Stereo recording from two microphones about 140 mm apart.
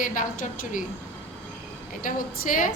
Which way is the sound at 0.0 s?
75° left (ahead or behind).